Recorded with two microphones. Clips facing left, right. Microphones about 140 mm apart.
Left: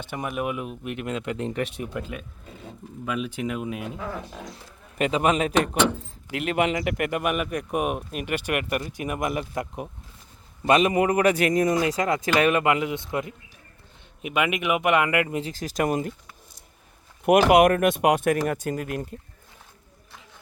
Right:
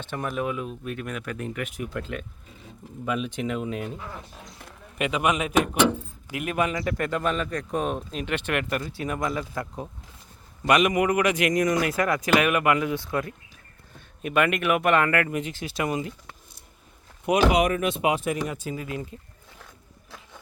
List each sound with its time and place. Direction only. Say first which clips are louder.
0.0 s speech: even; 10° left (ahead or behind); by 1.9 s 30° left (ahead or behind)
1.9 s speech: even; 10° left (ahead or behind)
4.9 s speech: left 3 dB; 35° left (ahead or behind)
7.0 s speech: right 1 dB; 15° left (ahead or behind)
10.7 s speech: left 1 dB; 30° left (ahead or behind)
15.4 s speech: left 2 dB; 35° left (ahead or behind)
17.2 s speech: left 5 dB; 55° left (ahead or behind)